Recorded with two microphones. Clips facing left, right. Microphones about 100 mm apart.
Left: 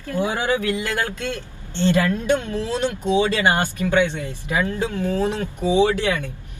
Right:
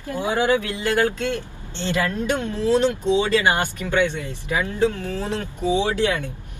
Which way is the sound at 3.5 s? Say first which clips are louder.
Left 1 dB; 20° right (ahead or behind).